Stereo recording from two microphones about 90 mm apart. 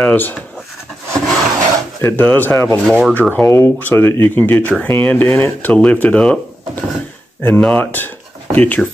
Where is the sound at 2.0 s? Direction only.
20° left (ahead or behind).